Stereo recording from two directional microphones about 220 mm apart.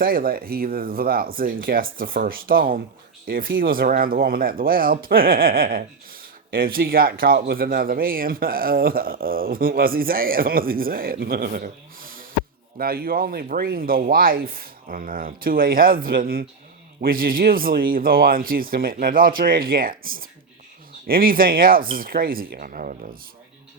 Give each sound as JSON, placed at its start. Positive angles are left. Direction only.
{"t": 0.0, "sound": "speech", "side_deg": -40}